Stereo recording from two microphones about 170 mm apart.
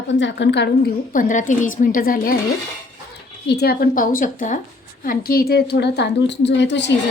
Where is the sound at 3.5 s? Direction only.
70° left (ahead or behind).